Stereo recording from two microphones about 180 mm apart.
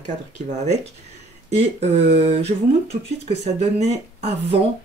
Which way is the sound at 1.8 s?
35° right (ahead or behind).